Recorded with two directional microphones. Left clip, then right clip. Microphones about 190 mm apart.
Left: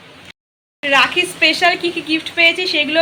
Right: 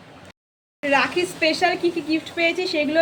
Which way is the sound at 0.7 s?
Centre (ahead or behind).